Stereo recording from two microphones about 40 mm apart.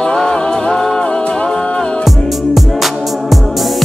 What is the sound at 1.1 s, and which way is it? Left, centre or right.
Music, left.